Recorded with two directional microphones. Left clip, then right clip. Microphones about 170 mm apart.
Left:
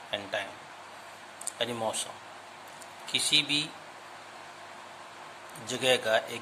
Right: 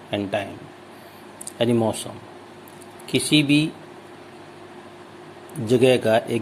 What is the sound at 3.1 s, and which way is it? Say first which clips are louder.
Speech: right 7 dB; 25° right (ahead or behind).